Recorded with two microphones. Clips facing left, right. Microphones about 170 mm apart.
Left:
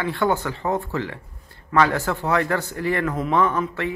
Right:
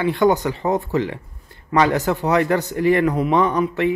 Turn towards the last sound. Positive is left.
turn(degrees=-15)  # may be behind; listen again after turning